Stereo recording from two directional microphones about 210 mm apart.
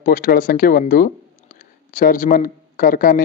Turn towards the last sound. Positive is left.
turn(degrees=40)  # may be behind; listen again after turning